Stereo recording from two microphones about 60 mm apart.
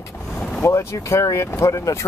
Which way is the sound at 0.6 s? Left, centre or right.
Left.